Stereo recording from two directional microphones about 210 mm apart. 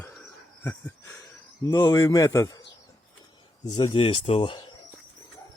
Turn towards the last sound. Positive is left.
turn(degrees=25)  # may be behind; listen again after turning